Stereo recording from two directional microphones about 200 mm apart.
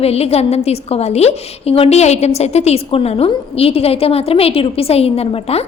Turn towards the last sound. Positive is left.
turn(degrees=30)  # may be behind; listen again after turning